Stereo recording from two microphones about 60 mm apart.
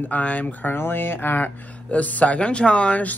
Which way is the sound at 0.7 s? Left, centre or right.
Left.